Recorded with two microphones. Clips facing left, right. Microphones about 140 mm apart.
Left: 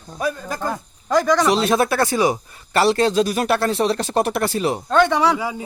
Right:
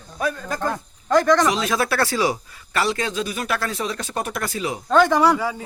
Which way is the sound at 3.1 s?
80° left.